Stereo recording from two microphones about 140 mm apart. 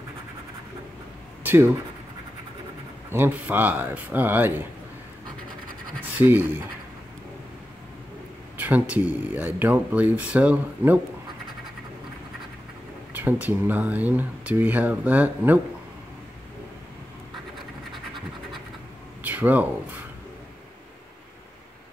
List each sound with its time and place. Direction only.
1.4 s a sound: 15° right (ahead or behind)
3.1 s speech: 15° right (ahead or behind)
6.1 s speech: 15° right (ahead or behind)
8.5 s speech: 10° right (ahead or behind)
13.1 s speech: 15° right (ahead or behind)
19.2 s a sound: 10° right (ahead or behind)